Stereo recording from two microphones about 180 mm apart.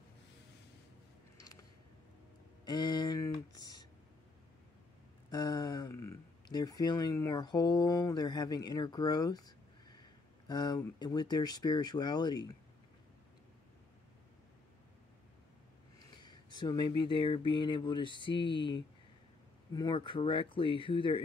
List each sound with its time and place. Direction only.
2.6 s a sound: 20° left (ahead or behind)
5.3 s speech: 20° left (ahead or behind)
16.2 s speech: 25° left (ahead or behind)